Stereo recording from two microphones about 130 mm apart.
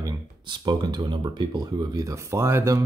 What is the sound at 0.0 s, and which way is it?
Speech, 35° right (ahead or behind).